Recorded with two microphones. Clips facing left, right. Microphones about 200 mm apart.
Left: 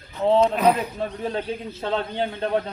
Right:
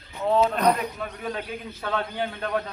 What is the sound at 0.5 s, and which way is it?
Speech, 5° left (ahead or behind).